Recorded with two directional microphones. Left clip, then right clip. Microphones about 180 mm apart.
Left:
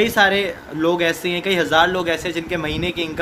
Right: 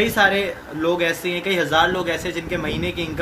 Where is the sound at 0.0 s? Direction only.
60° left (ahead or behind).